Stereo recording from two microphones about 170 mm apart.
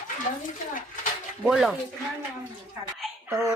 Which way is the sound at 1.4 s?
5° right (ahead or behind).